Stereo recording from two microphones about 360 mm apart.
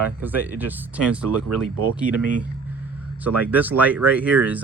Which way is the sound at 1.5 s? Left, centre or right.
Right.